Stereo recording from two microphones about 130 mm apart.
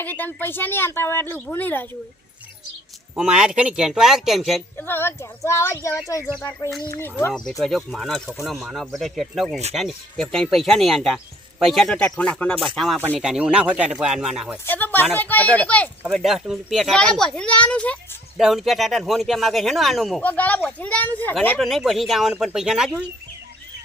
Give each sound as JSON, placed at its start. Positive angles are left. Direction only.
{"t": 0.0, "sound": "speech", "side_deg": 15}
{"t": 3.2, "sound": "speech", "side_deg": -5}
{"t": 4.8, "sound": "speech", "side_deg": 15}
{"t": 7.6, "sound": "speech", "side_deg": 0}
{"t": 14.6, "sound": "speech", "side_deg": 15}
{"t": 16.0, "sound": "speech", "side_deg": 0}
{"t": 18.3, "sound": "speech", "side_deg": 0}
{"t": 20.2, "sound": "speech", "side_deg": 10}
{"t": 21.6, "sound": "speech", "side_deg": 0}